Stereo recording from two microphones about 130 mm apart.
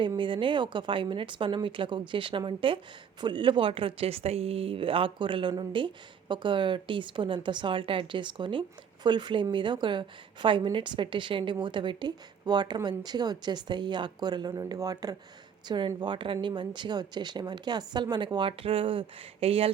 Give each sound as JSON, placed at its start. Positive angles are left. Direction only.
{"t": 0.2, "sound": "speech", "side_deg": -40}